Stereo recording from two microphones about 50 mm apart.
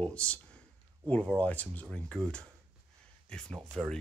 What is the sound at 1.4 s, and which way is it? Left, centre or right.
Speech, left.